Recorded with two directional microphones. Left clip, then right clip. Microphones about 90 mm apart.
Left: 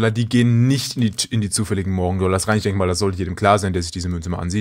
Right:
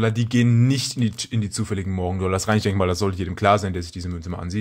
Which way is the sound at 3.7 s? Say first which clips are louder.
Left 6 dB; 50° left (ahead or behind).